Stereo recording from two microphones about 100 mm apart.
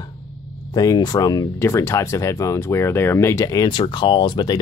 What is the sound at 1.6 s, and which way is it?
Speech, 30° left (ahead or behind).